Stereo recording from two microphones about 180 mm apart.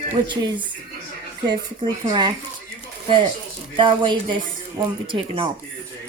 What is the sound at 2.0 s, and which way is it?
Speech, 25° right (ahead or behind).